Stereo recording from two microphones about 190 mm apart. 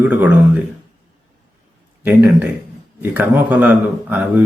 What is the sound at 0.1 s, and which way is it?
Speech, 10° right (ahead or behind).